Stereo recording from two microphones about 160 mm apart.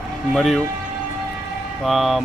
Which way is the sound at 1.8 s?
Centre (ahead or behind).